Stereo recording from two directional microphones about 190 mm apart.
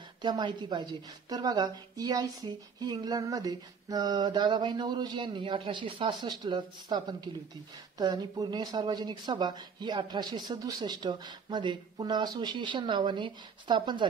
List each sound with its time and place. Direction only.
0.2 s speech: 25° right (ahead or behind)